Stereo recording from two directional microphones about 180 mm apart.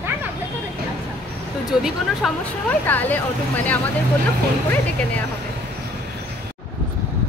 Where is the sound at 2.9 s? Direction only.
10° left (ahead or behind).